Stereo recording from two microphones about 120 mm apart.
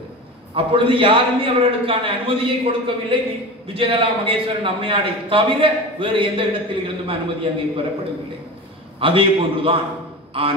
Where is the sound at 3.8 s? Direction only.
45° right (ahead or behind).